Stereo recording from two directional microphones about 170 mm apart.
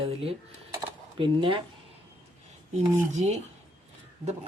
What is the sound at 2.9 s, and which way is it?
Speech, 45° right (ahead or behind).